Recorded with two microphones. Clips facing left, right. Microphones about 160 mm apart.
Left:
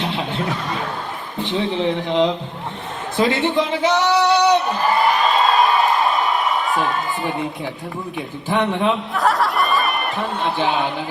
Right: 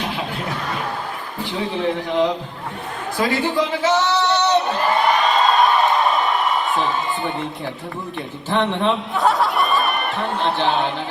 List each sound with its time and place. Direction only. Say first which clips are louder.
1.4 s speech: left 3 dB; 20° left (ahead or behind)
5.0 s a sound: right 1 dB; centre (ahead or behind)
8.4 s speech: even; centre (ahead or behind)